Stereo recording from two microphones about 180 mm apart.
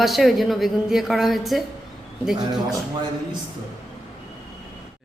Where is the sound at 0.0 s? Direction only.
Centre (ahead or behind).